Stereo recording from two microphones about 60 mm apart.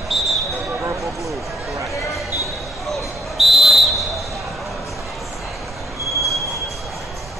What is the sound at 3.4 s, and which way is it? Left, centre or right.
Whistle, centre.